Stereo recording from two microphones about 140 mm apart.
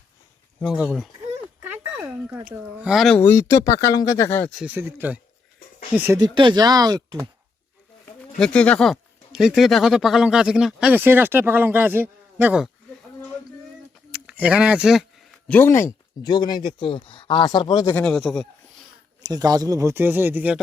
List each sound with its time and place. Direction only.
0.6 s a woman's voice: 5° right (ahead or behind)
3.2 s speech: 20° left (ahead or behind)
4.6 s a woman's voice: 15° right (ahead or behind)
6.1 s speech: 35° right (ahead or behind)
8.4 s speech: 10° left (ahead or behind); by 12.6 s 10° right (ahead or behind)
14.1 s speech: 10° right (ahead or behind)
15.4 s speech: 15° left (ahead or behind)
16.2 s speech: 30° left (ahead or behind)
17.9 s speech: 5° left (ahead or behind)
19.2 s speech: 30° right (ahead or behind); by 20.6 s 15° right (ahead or behind)